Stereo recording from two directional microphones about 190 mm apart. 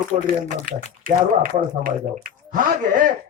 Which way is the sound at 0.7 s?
45° right (ahead or behind).